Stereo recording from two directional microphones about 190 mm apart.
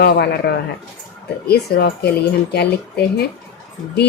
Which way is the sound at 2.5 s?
60° left (ahead or behind).